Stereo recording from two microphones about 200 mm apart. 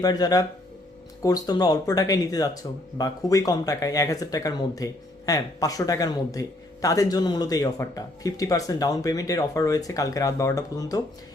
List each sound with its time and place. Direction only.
0.0 s speech: 20° left (ahead or behind)